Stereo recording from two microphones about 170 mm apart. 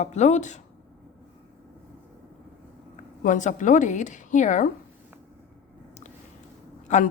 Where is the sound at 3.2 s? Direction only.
50° left (ahead or behind).